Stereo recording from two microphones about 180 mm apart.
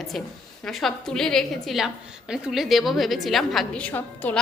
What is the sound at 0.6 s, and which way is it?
A woman's voice, centre (ahead or behind).